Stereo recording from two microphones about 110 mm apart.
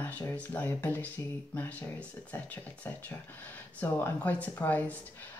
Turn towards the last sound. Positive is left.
turn(degrees=15)  # may be behind; listen again after turning